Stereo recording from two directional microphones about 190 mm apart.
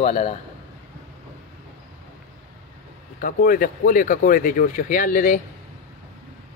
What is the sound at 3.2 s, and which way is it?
Speech, 50° left (ahead or behind).